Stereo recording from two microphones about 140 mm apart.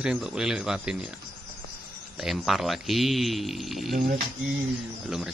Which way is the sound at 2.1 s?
Centre (ahead or behind).